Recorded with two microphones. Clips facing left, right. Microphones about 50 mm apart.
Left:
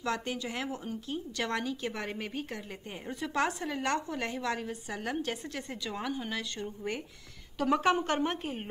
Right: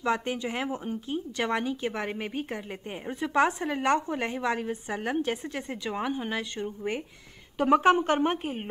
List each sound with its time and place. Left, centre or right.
0.0 s a woman's voice: right
8.4 s a woman's voice: centre